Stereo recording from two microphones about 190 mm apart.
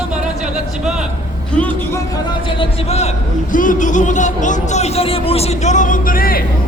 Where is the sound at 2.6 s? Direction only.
35° left (ahead or behind).